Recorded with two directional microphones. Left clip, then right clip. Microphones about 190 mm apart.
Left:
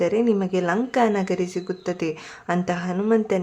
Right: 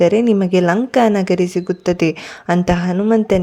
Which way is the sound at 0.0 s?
40° right (ahead or behind).